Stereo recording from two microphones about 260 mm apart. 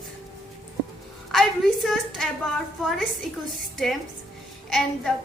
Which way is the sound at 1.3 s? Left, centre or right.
Centre.